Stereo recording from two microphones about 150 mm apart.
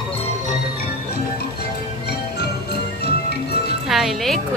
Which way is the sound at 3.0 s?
90° left.